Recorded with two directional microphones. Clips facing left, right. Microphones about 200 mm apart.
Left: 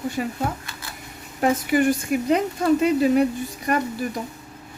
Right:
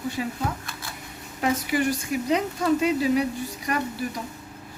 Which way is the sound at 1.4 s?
50° left (ahead or behind).